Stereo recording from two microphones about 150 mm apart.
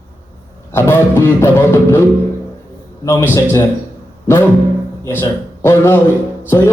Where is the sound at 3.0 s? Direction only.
20° left (ahead or behind).